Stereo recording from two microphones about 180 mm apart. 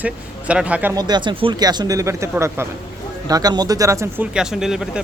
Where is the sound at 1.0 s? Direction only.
25° right (ahead or behind).